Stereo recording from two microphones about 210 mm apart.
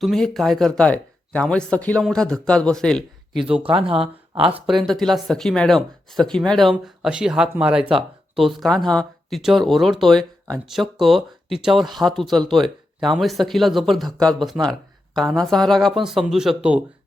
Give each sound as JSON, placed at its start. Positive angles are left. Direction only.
{"t": 0.0, "sound": "speech", "side_deg": 0}
{"t": 3.6, "sound": "speech", "side_deg": -25}
{"t": 4.5, "sound": "speech", "side_deg": 0}